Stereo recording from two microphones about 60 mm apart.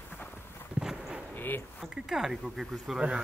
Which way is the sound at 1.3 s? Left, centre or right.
Left.